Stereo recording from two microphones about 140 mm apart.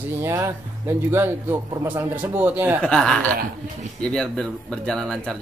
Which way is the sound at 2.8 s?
5° left (ahead or behind).